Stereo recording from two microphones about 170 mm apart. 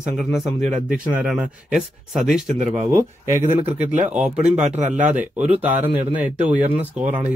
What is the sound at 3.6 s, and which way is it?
Speech, 40° right (ahead or behind).